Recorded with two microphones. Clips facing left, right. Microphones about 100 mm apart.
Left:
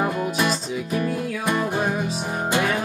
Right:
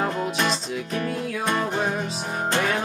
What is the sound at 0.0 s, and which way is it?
Music, 5° left (ahead or behind).